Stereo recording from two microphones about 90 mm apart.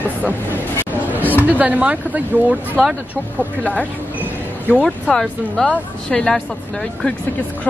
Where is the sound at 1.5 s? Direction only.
15° right (ahead or behind).